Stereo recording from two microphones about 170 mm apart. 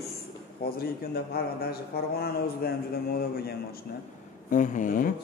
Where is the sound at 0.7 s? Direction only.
65° left (ahead or behind).